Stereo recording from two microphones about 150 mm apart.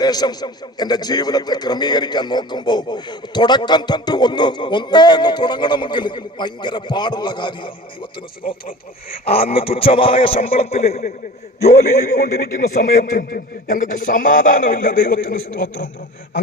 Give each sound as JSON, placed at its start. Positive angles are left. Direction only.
{"t": 0.0, "sound": "a man's voice", "side_deg": 25}
{"t": 9.2, "sound": "a man's voice", "side_deg": 40}
{"t": 12.2, "sound": "a man's voice", "side_deg": 75}